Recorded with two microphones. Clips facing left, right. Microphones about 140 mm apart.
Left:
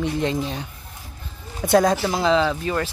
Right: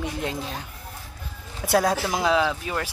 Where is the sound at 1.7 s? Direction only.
5° right (ahead or behind).